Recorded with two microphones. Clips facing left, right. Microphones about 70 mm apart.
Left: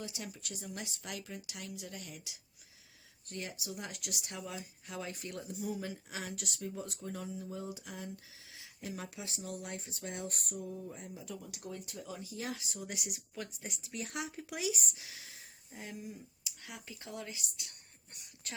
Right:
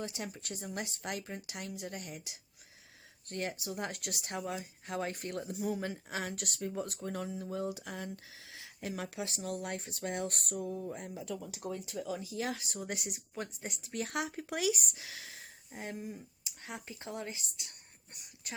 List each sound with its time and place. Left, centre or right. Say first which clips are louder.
0.0 s speech: right 4 dB; right
3.2 s speech: right 5 dB; right
10.5 s speech: right 5 dB; right
13.1 s speech: right 3 dB; right
13.9 s speech: right 5 dB; right
15.7 s speech: right 4 dB; right
18.5 s a sound: right 2 dB; centre